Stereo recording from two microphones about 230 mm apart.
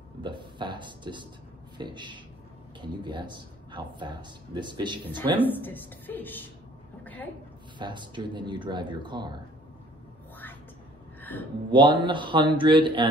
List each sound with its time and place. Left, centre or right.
0.2 s speech: centre
5.3 s a woman's voice: centre
7.8 s speech: centre
11.1 s a sound: centre
11.7 s speech: right